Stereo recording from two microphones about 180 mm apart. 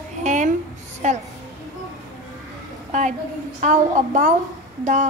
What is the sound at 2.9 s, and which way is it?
A woman's voice, 45° right (ahead or behind).